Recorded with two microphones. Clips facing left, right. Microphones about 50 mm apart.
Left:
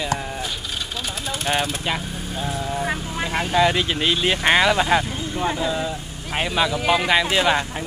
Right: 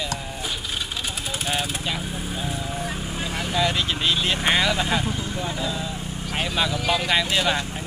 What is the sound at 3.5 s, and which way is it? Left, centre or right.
Speech, centre.